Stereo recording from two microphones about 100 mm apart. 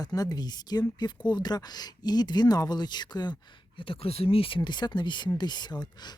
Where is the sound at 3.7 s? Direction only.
60° left (ahead or behind).